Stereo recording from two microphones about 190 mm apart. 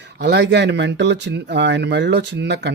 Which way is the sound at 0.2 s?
65° right (ahead or behind).